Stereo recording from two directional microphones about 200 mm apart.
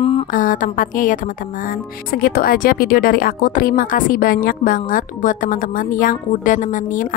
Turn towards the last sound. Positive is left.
turn(degrees=40)  # may be behind; listen again after turning